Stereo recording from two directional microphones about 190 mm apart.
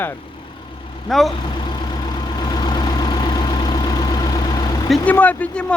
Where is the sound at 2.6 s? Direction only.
20° left (ahead or behind).